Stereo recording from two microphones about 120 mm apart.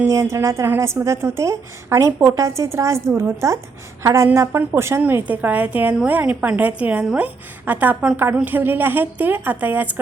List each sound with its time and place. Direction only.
0.1 s a woman's voice: 25° right (ahead or behind)